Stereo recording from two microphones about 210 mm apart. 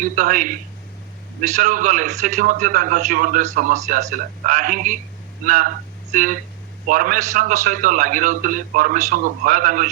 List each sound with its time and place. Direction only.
0.0 s a man's voice: 40° right (ahead or behind)